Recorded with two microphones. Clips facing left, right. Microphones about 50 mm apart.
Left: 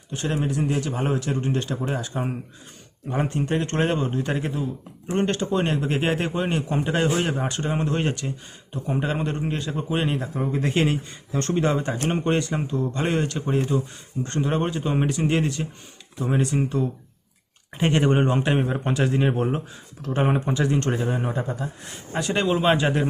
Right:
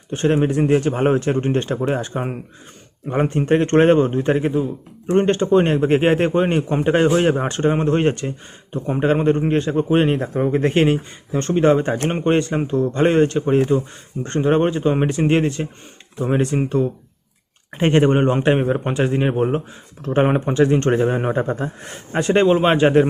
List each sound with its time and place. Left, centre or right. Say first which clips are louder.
0.1 s speech: right 8 dB; right